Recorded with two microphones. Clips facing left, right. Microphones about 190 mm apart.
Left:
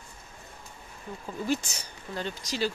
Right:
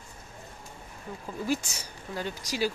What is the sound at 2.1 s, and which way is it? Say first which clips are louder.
Speech: even; 10° right (ahead or behind).